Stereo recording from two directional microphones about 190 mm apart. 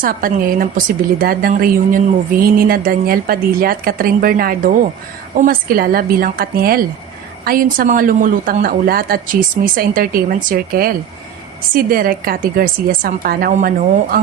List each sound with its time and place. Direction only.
0.0 s a woman's voice: 45° right (ahead or behind)